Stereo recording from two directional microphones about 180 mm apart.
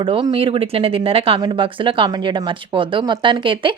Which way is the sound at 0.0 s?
25° right (ahead or behind).